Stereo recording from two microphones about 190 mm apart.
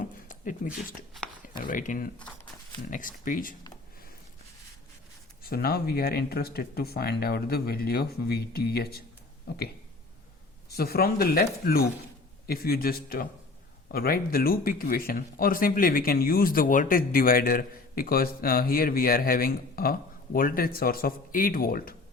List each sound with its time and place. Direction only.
0.0 s a sound: 45° left (ahead or behind)
1.5 s speech: 45° left (ahead or behind)
5.4 s speech: 55° left (ahead or behind)
10.7 s speech: 55° left (ahead or behind)